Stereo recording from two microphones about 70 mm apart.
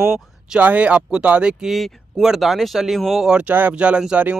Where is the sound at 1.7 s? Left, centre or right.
Centre.